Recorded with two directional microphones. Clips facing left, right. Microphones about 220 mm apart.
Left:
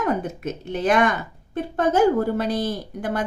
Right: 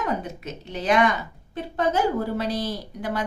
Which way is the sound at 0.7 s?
50° left (ahead or behind).